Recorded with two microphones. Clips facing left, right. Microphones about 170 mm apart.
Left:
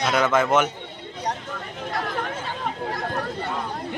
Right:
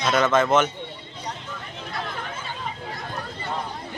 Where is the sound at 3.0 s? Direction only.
55° left (ahead or behind).